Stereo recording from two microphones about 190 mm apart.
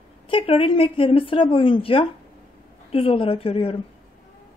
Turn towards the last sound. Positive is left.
turn(degrees=30)  # may be behind; listen again after turning